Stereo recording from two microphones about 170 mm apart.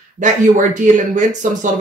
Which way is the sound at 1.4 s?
50° right (ahead or behind).